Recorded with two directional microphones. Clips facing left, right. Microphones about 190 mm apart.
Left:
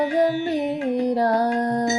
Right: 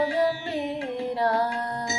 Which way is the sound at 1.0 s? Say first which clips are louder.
Left 3 dB; 40° left (ahead or behind).